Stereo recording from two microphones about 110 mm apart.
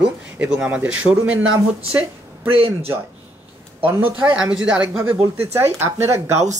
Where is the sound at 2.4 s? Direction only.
55° right (ahead or behind).